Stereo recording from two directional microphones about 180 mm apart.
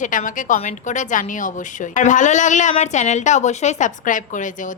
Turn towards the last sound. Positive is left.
turn(degrees=45)  # may be behind; listen again after turning